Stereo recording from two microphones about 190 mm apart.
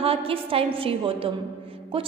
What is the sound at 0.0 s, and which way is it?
A woman's voice, 30° right (ahead or behind).